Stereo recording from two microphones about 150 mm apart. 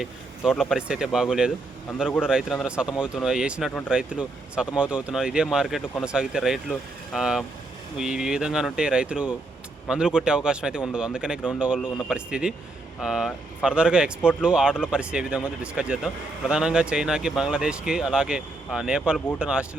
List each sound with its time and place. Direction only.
0.0 s speech: 5° right (ahead or behind)